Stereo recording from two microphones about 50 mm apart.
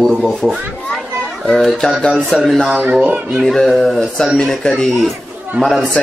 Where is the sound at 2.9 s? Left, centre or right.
Right.